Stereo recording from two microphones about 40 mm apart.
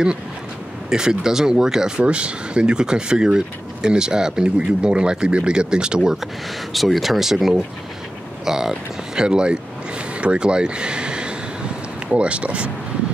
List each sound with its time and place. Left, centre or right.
0.8 s speech: centre
6.7 s speech: centre; by 12.7 s right